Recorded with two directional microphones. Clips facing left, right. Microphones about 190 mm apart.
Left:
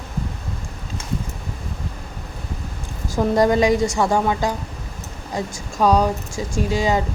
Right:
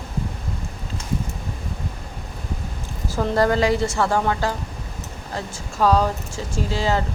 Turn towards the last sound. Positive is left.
turn(degrees=15)  # may be behind; listen again after turning